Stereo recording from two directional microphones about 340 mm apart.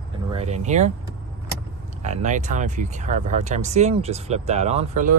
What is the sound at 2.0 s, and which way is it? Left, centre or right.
Speech, right.